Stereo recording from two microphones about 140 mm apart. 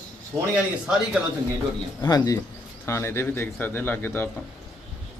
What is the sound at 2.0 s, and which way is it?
Speech, 30° left (ahead or behind).